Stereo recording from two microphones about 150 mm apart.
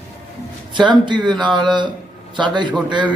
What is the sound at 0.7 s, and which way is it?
A man's voice, 30° right (ahead or behind).